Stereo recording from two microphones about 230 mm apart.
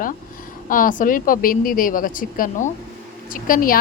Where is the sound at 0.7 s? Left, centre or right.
Left.